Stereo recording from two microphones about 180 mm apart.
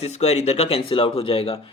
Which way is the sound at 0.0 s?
35° left (ahead or behind).